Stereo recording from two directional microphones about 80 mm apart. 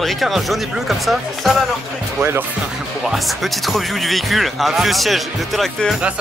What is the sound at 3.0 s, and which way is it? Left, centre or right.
Speech, centre.